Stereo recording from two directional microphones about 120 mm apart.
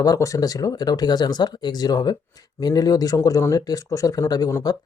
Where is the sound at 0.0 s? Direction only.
30° left (ahead or behind).